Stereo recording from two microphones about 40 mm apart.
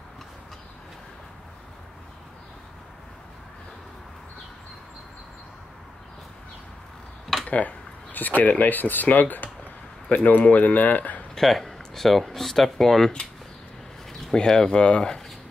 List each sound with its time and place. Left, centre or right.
7.4 s speech: left
11.3 s speech: centre
14.2 s speech: centre